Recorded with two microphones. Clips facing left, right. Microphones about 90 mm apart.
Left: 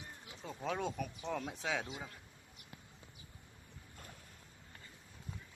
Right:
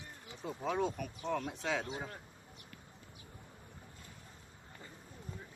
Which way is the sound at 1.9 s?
40° right (ahead or behind).